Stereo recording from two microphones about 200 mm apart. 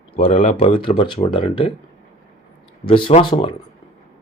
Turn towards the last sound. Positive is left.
turn(degrees=25)  # may be behind; listen again after turning